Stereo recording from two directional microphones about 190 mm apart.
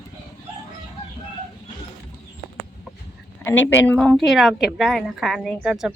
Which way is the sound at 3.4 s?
10° left (ahead or behind).